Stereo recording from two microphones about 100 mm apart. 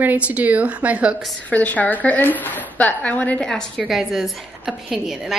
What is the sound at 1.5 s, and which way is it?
A woman's voice, 15° left (ahead or behind).